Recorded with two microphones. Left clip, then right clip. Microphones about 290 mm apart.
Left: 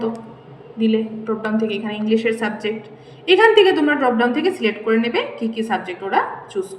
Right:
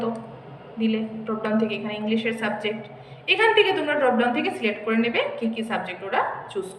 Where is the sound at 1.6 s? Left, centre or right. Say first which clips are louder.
Left 3 dB; centre.